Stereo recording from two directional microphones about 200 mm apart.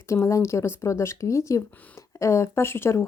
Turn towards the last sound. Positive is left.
turn(degrees=15)  # may be behind; listen again after turning